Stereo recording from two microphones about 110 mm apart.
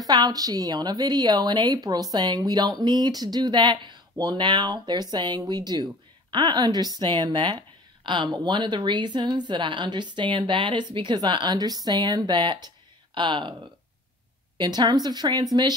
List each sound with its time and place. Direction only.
0.0 s a woman's voice: 35° right (ahead or behind)
14.6 s a woman's voice: 40° right (ahead or behind)